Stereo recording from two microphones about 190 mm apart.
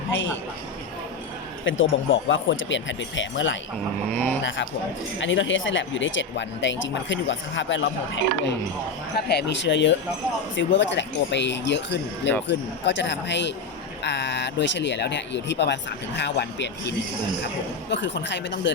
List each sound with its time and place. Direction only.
1.6 s speech: 90° left
4.1 s speech: 10° left (ahead or behind)
5.2 s speech: 80° left
9.1 s speech: 65° left (ahead or behind)
17.9 s speech: 70° left (ahead or behind)